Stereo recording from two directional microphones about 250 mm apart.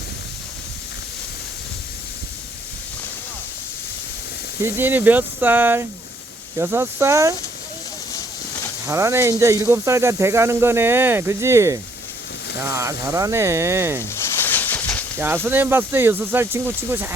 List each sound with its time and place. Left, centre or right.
4.6 s speech: centre
8.9 s speech: centre
14.0 s a sound: centre
15.2 s speech: centre